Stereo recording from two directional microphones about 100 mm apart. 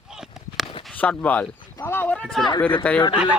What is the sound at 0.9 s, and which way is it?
Speech, 15° left (ahead or behind).